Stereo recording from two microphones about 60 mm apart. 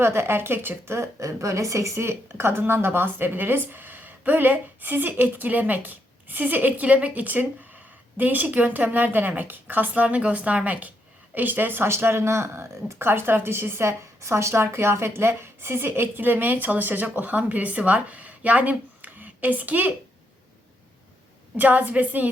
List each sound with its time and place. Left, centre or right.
0.0 s speech: right
21.5 s speech: right